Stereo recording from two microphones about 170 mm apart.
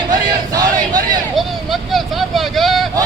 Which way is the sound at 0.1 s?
20° right (ahead or behind).